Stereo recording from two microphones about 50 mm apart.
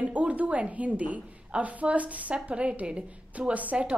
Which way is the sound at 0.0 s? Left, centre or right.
Right.